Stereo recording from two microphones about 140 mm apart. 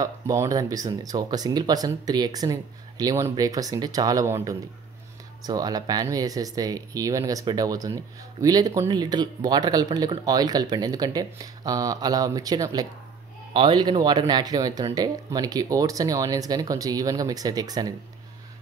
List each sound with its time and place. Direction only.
0.0 s speech: 25° right (ahead or behind)